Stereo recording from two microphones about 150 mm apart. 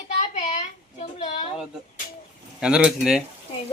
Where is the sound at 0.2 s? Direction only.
50° left (ahead or behind).